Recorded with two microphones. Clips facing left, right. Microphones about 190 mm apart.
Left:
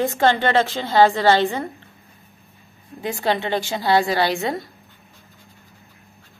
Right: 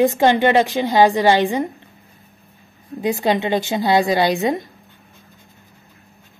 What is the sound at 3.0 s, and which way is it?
A woman's voice, 15° right (ahead or behind).